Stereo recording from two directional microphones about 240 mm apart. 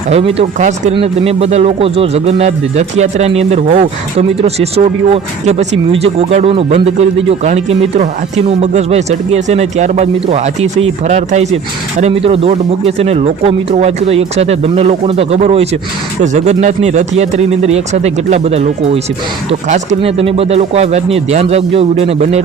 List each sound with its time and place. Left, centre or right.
0.1 s speech: right